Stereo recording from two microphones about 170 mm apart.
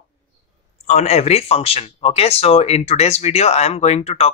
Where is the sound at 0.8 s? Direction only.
40° left (ahead or behind).